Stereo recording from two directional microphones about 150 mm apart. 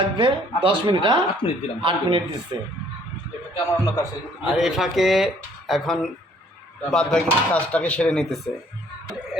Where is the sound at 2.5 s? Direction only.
30° right (ahead or behind).